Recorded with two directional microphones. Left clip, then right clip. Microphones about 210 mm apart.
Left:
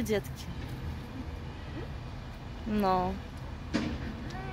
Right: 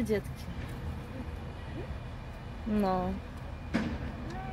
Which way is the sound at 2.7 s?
10° left (ahead or behind).